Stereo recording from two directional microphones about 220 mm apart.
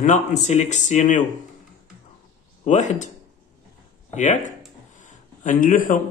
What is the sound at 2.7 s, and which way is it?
Speech, 35° left (ahead or behind).